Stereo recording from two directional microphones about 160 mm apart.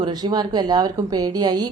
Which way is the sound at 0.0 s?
25° right (ahead or behind).